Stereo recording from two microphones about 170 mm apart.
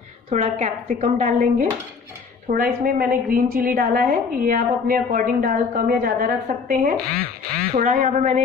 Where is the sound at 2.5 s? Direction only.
60° right (ahead or behind).